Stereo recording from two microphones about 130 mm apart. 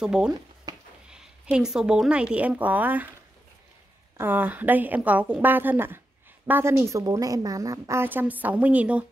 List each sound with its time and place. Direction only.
0.0 s speech: 5° right (ahead or behind)
0.7 s a sound: 25° right (ahead or behind)
1.1 s speech: 5° right (ahead or behind)
4.2 s a woman's voice: 15° right (ahead or behind)